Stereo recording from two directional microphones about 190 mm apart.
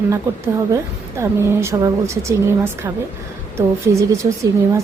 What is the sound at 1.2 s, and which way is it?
Speech, 15° right (ahead or behind).